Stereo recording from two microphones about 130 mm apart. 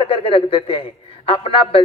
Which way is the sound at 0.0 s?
40° left (ahead or behind).